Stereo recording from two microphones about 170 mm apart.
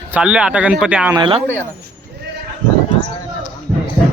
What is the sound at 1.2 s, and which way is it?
Speech, 30° right (ahead or behind).